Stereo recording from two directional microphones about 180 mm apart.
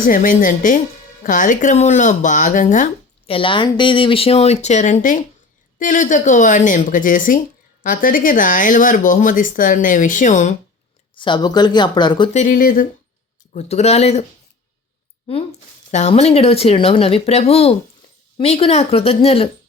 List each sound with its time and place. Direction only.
0.0 s speech: 50° left (ahead or behind)
3.2 s speech: 30° left (ahead or behind)
11.1 s speech: 25° left (ahead or behind)
12.3 s speech: 45° left (ahead or behind)
13.5 s speech: 40° left (ahead or behind)
15.9 s speech: 40° left (ahead or behind)